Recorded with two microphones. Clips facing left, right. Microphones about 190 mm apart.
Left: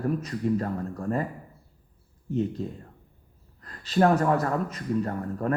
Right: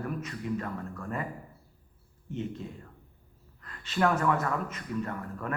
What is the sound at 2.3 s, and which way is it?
Speech, 35° left (ahead or behind).